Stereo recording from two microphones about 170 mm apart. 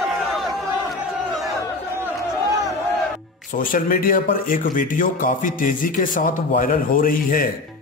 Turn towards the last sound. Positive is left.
turn(degrees=55)  # may be behind; listen again after turning